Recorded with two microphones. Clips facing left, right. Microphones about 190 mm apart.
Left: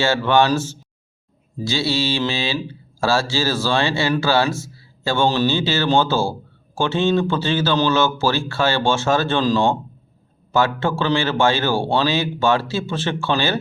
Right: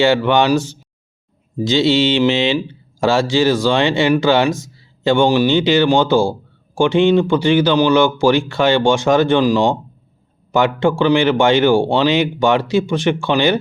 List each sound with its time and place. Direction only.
0.0 s speech: 15° right (ahead or behind)